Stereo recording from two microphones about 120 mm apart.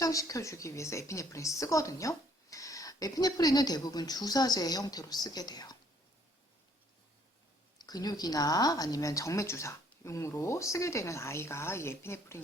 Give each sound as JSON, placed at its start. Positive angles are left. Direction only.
{"t": 0.0, "sound": "a woman's voice", "side_deg": 30}
{"t": 7.8, "sound": "speech", "side_deg": 35}